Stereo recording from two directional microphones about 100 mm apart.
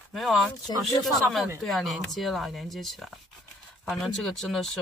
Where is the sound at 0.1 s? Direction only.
Centre (ahead or behind).